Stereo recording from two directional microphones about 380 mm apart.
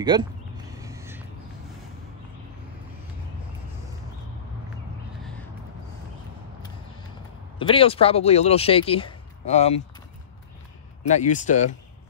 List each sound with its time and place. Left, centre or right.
0.0 s a sound: centre
7.5 s speech: centre
11.3 s speech: centre